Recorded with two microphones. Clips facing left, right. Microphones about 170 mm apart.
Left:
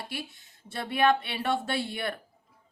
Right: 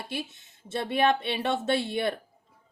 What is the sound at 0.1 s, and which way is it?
A woman's voice, 25° right (ahead or behind).